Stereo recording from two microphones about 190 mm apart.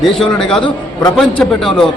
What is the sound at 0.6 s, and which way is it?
Speech, 20° left (ahead or behind).